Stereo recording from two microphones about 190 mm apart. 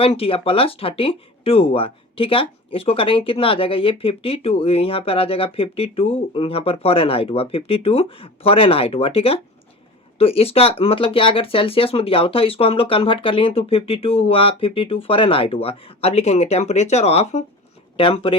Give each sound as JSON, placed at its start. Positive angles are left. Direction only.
{"t": 0.0, "sound": "speech", "side_deg": 30}